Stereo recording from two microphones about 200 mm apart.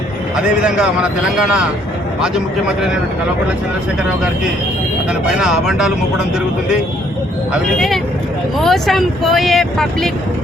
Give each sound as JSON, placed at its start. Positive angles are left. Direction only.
{"t": 0.3, "sound": "speech", "side_deg": -5}
{"t": 5.4, "sound": "speech", "side_deg": -5}
{"t": 8.5, "sound": "speech", "side_deg": 0}